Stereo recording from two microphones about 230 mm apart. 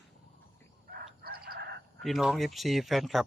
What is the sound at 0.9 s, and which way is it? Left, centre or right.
Chicken, right.